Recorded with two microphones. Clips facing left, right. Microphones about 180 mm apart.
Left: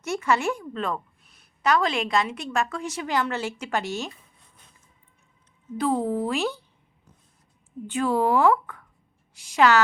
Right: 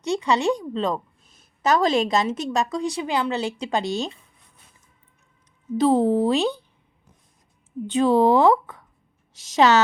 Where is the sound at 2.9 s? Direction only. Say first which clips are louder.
Left 1 dB; 15° right (ahead or behind).